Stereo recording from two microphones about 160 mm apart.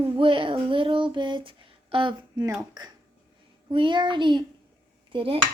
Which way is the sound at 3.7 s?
30° right (ahead or behind).